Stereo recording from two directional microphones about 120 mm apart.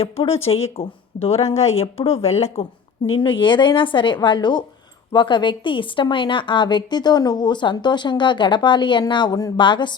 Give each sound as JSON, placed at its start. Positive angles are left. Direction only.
{"t": 0.0, "sound": "speech", "side_deg": 55}
{"t": 3.2, "sound": "a woman's voice", "side_deg": 45}